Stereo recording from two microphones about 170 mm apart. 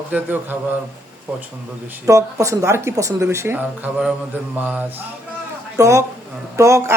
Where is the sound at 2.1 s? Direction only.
20° right (ahead or behind).